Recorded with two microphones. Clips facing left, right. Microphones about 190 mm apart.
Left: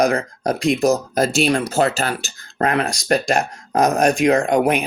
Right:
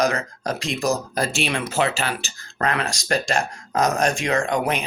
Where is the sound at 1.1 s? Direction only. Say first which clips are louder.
Left 7 dB; 40° left (ahead or behind); by 4.3 s 60° left (ahead or behind).